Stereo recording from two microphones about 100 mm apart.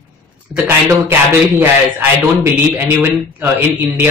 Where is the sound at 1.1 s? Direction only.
15° right (ahead or behind).